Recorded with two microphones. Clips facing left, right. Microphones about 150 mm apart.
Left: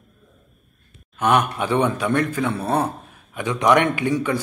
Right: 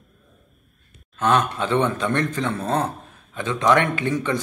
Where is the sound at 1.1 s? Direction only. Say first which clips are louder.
Left 1 dB; 15° left (ahead or behind).